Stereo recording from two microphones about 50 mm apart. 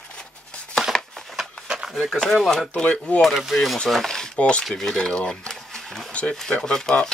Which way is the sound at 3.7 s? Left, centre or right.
Centre.